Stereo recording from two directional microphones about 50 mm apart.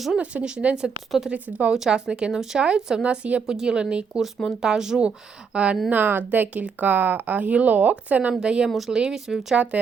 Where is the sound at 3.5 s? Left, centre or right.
Centre.